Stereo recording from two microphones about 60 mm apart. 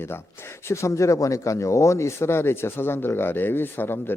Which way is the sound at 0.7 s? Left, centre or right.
Left.